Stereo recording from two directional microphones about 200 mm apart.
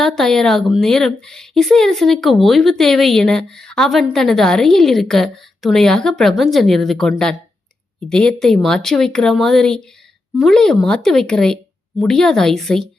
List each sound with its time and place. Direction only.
0.0 s a woman's voice: centre (ahead or behind)